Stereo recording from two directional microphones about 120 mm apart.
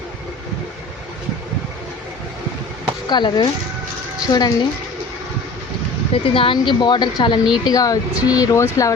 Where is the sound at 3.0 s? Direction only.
40° left (ahead or behind).